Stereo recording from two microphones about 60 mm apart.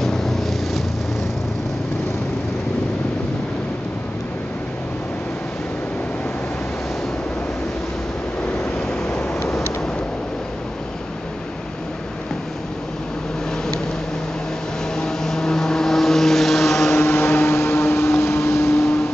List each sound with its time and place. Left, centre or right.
0.0 s vehicle: centre
15.0 s vehicle: centre
16.9 s vehicle: left